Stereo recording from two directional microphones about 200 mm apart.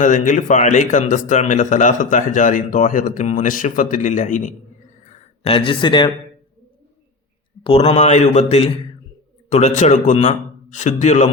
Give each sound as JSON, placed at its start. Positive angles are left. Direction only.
{"t": 0.0, "sound": "speech", "side_deg": 40}
{"t": 7.6, "sound": "speech", "side_deg": 30}